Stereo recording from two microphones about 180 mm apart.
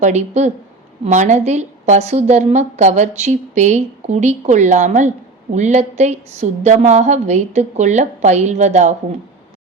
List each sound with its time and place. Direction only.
0.0 s a woman's voice: 40° right (ahead or behind)